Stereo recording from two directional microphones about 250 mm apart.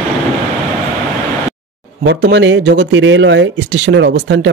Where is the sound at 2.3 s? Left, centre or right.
Right.